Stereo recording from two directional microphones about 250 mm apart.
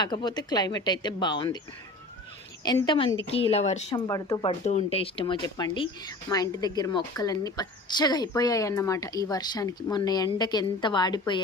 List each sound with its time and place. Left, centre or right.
0.0 s speech: centre
2.6 s a woman's voice: centre
4.0 s speech: centre
4.6 s speech: left